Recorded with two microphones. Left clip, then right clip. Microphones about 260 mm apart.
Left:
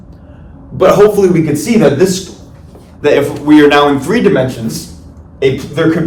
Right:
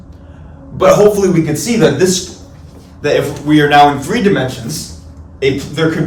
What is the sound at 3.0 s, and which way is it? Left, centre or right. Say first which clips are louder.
Speech: left 4 dB; centre.